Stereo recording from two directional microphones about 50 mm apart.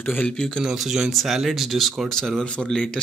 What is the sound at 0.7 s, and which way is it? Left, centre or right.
Speech, centre.